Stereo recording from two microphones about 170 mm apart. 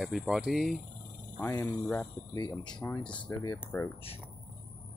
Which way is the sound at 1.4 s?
15° left (ahead or behind).